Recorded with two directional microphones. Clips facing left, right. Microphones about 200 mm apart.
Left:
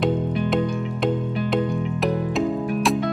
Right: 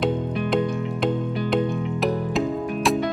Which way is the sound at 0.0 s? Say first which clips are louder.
Left 2 dB; centre (ahead or behind).